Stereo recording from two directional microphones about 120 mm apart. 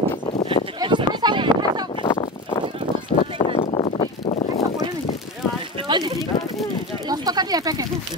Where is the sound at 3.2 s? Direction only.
55° left (ahead or behind).